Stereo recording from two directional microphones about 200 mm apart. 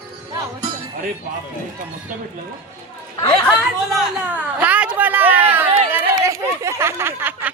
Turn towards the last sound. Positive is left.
turn(degrees=-10)  # may be behind; listen again after turning